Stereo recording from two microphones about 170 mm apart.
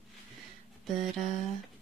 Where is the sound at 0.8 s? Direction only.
Centre (ahead or behind).